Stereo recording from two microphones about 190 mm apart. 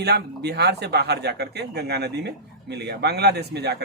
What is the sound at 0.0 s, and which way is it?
Speech, 60° right (ahead or behind).